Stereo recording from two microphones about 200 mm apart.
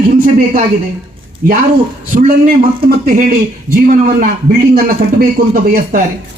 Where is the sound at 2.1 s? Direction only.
35° right (ahead or behind).